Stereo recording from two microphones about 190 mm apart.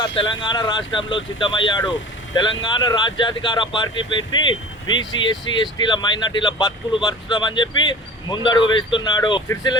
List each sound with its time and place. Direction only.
0.0 s speech: 25° left (ahead or behind)